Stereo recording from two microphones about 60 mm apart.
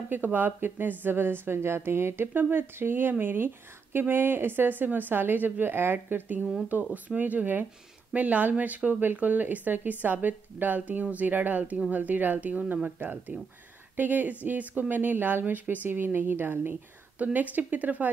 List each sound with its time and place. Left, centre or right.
0.1 s a woman's voice: right